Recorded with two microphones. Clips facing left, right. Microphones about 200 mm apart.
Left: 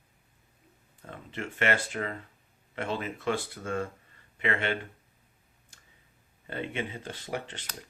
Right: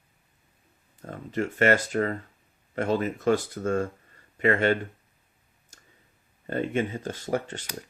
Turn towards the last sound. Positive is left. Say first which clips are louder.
# right 7 dB
turn(degrees=-45)  # may be behind; listen again after turning